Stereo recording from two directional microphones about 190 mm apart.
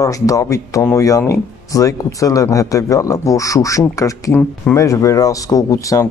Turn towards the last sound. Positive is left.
turn(degrees=15)  # may be behind; listen again after turning